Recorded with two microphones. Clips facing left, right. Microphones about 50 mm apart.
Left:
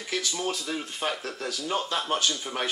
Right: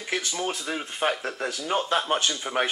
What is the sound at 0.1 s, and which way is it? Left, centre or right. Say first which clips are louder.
Speech: right 1 dB; right.